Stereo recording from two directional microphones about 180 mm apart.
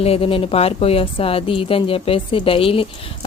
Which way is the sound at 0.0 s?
30° left (ahead or behind).